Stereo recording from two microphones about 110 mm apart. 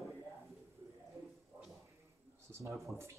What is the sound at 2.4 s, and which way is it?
Speech, 25° right (ahead or behind).